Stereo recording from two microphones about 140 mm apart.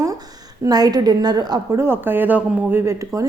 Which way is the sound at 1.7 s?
15° right (ahead or behind).